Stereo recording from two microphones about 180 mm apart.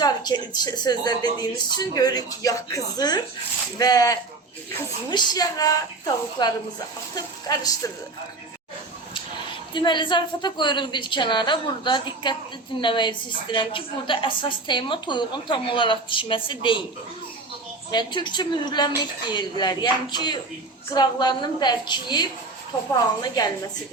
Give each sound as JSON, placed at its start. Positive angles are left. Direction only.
{"t": 0.0, "sound": "a woman's voice", "side_deg": 25}
{"t": 9.7, "sound": "a woman's voice", "side_deg": 25}
{"t": 17.9, "sound": "a woman's voice", "side_deg": 25}